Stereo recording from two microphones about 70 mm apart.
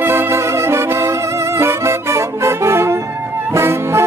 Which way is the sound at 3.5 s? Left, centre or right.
Right.